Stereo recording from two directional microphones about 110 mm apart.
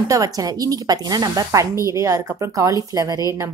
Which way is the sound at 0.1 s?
35° right (ahead or behind).